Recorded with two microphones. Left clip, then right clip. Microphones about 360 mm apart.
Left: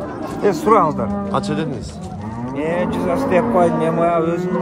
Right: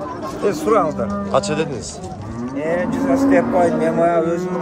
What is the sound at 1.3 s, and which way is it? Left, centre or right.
Speech, centre.